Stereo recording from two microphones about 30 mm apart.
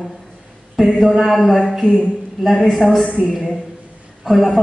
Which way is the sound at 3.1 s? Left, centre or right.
Left.